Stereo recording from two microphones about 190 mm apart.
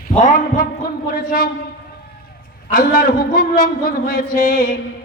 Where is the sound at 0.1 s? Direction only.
45° left (ahead or behind).